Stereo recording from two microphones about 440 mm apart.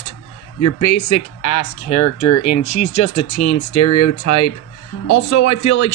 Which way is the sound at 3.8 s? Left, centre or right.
Left.